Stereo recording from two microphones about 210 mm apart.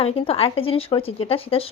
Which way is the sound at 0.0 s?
25° left (ahead or behind).